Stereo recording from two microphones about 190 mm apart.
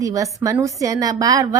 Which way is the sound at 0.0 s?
15° right (ahead or behind).